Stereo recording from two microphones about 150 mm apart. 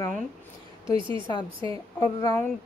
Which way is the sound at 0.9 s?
35° right (ahead or behind).